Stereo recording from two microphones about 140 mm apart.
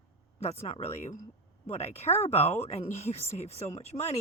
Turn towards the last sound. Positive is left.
turn(degrees=50)  # may be behind; listen again after turning